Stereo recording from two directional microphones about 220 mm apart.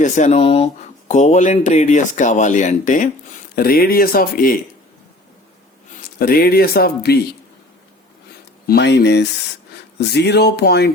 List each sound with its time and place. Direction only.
0.0 s speech: 30° left (ahead or behind)
6.1 s speech: 45° left (ahead or behind)
8.6 s speech: 45° left (ahead or behind)